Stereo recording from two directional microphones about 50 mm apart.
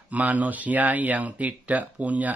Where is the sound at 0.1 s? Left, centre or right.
Right.